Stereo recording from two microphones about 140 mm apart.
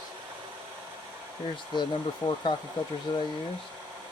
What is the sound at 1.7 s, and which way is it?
Speech, 35° left (ahead or behind).